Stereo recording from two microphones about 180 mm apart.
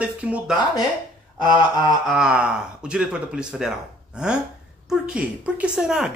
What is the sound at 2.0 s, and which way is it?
Speech, 5° right (ahead or behind).